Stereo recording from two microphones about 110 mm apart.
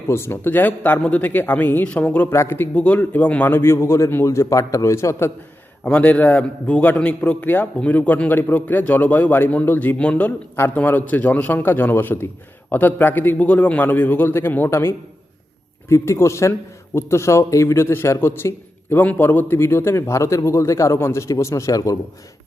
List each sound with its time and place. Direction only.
0.1 s a man's voice: 20° left (ahead or behind)
5.8 s a man's voice: 10° left (ahead or behind); by 21.9 s 30° left (ahead or behind)